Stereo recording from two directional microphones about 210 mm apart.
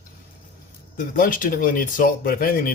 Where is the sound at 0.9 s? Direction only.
40° left (ahead or behind).